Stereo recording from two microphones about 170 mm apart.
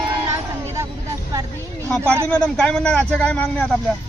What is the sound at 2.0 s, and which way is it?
Speech, 15° right (ahead or behind).